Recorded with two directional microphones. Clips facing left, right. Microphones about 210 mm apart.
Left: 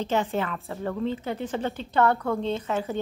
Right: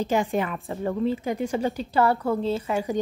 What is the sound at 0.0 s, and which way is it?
A woman's voice, 10° right (ahead or behind).